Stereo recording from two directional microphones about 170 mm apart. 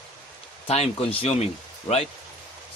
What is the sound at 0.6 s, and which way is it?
Speech, 35° left (ahead or behind).